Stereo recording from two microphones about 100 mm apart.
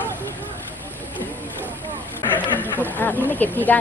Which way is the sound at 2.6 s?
20° left (ahead or behind).